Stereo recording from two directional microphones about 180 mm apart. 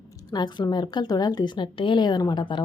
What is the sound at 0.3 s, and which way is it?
A woman's voice, 25° left (ahead or behind).